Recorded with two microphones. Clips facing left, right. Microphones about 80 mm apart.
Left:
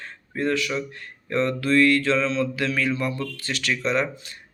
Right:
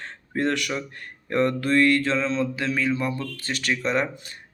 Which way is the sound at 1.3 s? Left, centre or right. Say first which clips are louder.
Even; right.